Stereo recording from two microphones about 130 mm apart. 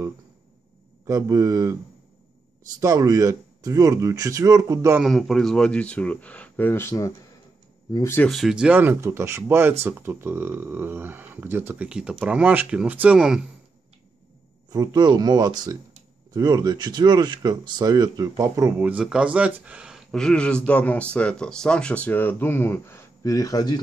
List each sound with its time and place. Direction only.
1.0 s speech: 25° right (ahead or behind)
2.8 s speech: 25° right (ahead or behind)
5.0 s speech: centre (ahead or behind); by 8.2 s 25° left (ahead or behind)
8.3 s speech: centre (ahead or behind)
14.7 s speech: 30° right (ahead or behind); by 23.8 s 30° left (ahead or behind)